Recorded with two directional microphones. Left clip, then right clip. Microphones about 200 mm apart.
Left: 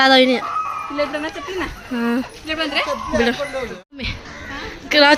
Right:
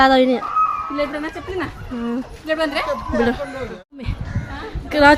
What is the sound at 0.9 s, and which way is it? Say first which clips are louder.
Speech: left 1 dB; 45° right (ahead or behind).